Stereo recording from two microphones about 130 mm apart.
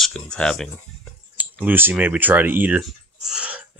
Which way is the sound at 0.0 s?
5° left (ahead or behind).